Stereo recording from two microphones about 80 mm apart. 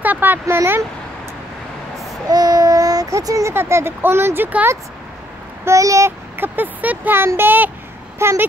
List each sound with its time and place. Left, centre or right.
0.0 s a sound: right
0.6 s speech: right
2.2 s baby cry: right
3.5 s speech: right
5.7 s speech: right
6.3 s speech: right